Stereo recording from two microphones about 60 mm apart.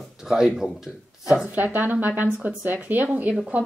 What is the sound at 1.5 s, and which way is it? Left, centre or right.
Speech, right.